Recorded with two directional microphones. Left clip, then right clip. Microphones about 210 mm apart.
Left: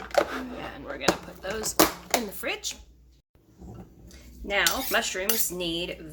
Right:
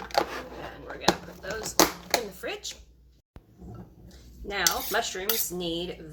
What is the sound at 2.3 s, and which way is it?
Speech, 35° left (ahead or behind).